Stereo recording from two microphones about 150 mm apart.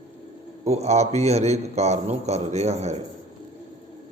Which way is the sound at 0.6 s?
45° right (ahead or behind).